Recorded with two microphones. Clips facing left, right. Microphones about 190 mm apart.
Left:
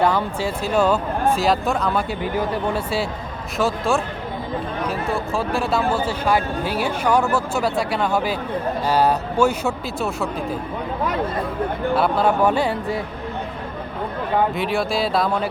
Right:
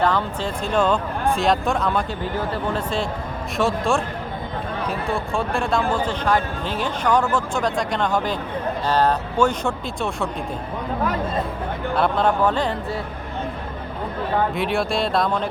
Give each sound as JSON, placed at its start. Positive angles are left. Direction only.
{"t": 0.0, "sound": "a man's voice", "side_deg": 10}
{"t": 2.2, "sound": "a man's voice", "side_deg": 15}
{"t": 11.9, "sound": "a man's voice", "side_deg": 5}
{"t": 14.5, "sound": "speech", "side_deg": 0}